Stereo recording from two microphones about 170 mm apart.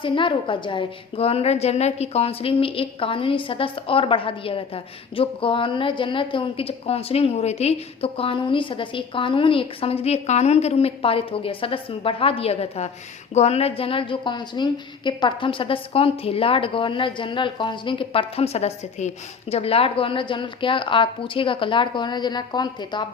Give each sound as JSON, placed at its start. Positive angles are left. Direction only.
{"t": 0.0, "sound": "a woman's voice", "side_deg": 30}